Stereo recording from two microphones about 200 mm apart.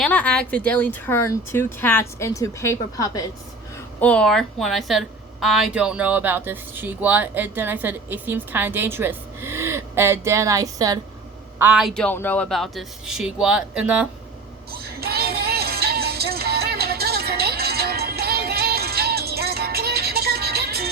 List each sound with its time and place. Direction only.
0.0 s speech: 5° left (ahead or behind)
4.0 s a woman's voice: 5° left (ahead or behind); by 11.0 s 20° right (ahead or behind)
11.6 s speech: 5° right (ahead or behind)
14.7 s music: 50° right (ahead or behind)